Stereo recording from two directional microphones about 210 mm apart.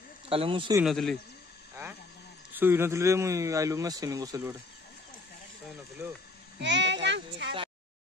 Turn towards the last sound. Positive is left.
turn(degrees=-55)  # may be behind; listen again after turning